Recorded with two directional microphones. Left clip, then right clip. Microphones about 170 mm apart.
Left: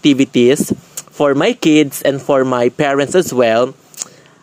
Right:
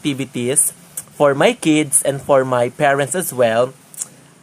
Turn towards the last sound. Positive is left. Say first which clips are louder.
# left 3 dB
turn(degrees=40)  # may be behind; listen again after turning